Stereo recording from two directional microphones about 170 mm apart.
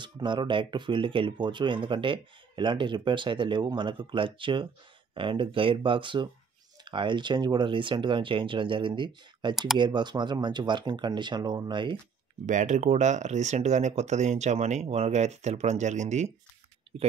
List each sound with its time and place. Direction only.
0.0 s speech: 25° right (ahead or behind)
12.4 s speech: 45° right (ahead or behind)